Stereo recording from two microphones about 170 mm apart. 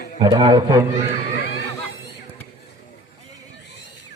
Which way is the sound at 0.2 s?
25° right (ahead or behind).